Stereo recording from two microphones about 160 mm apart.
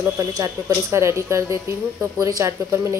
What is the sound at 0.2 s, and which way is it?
A woman's voice, 20° right (ahead or behind).